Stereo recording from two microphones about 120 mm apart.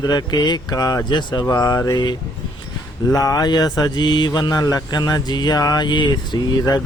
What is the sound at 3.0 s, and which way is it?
Speech, 30° left (ahead or behind).